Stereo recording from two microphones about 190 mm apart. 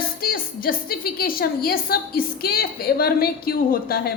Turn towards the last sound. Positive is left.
turn(degrees=50)  # may be behind; listen again after turning